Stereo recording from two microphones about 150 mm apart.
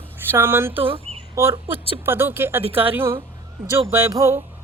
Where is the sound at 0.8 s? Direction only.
35° right (ahead or behind).